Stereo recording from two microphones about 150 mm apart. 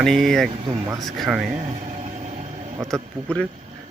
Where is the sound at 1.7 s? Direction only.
50° right (ahead or behind).